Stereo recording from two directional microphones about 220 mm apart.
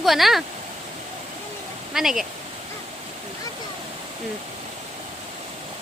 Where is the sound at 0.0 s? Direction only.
Centre (ahead or behind).